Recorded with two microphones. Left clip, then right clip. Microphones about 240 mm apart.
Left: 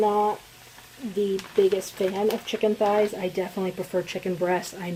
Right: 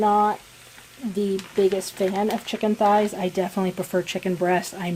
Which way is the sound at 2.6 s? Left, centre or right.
Right.